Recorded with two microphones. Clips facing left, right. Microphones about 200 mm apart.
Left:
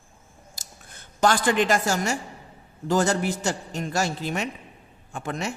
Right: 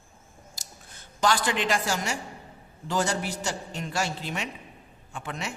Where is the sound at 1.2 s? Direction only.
50° left (ahead or behind).